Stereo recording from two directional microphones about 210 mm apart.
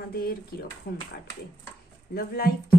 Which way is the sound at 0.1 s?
45° left (ahead or behind).